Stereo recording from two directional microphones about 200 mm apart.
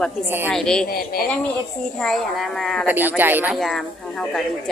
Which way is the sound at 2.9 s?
10° right (ahead or behind).